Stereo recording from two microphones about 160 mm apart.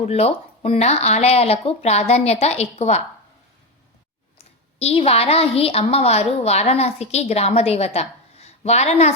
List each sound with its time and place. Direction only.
0.0 s a woman's voice: 40° left (ahead or behind)
4.8 s a woman's voice: 40° left (ahead or behind)